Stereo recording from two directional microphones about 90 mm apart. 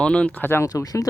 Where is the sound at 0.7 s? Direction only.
40° left (ahead or behind).